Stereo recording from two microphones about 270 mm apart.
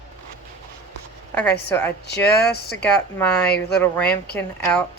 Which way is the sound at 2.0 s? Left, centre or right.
Left.